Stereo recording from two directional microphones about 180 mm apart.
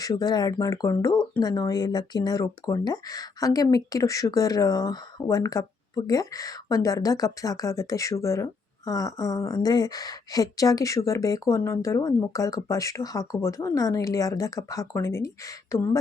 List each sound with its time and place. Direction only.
0.0 s speech: 20° left (ahead or behind)